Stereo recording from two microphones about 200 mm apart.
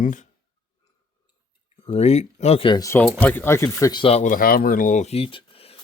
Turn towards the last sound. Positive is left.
turn(degrees=30)  # may be behind; listen again after turning